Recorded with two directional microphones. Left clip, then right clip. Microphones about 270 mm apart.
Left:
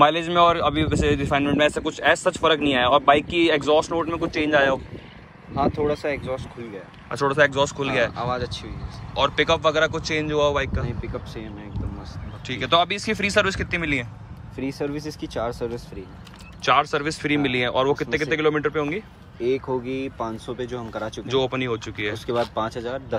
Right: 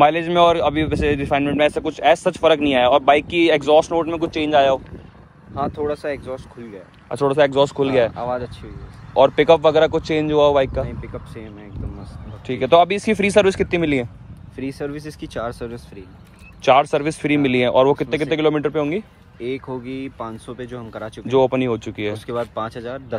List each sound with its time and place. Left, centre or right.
0.0 s a man's voice: right
12.4 s a man's voice: right